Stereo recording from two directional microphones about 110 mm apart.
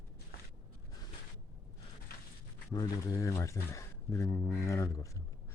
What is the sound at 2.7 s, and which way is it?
Speech, 35° left (ahead or behind).